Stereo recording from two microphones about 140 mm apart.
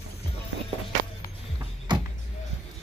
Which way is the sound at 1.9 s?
30° right (ahead or behind).